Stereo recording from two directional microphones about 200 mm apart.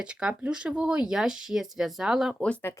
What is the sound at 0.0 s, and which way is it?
Speech, 5° right (ahead or behind).